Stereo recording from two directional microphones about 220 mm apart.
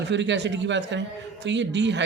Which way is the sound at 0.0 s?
55° right (ahead or behind).